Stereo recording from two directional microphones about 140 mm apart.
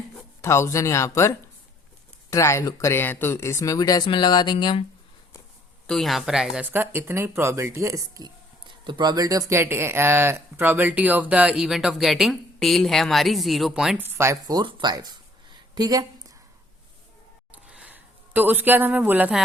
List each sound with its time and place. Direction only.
0.4 s speech: 20° left (ahead or behind); by 4.9 s 40° left (ahead or behind)
5.9 s speech: centre (ahead or behind)
6.7 s speech: 15° right (ahead or behind)
14.0 s speech: 15° right (ahead or behind)
17.7 s speech: 10° right (ahead or behind)